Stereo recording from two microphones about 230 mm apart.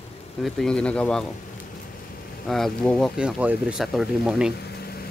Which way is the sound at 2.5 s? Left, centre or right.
Centre.